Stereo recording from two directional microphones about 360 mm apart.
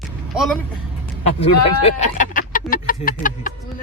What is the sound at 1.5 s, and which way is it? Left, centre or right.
Speech, centre.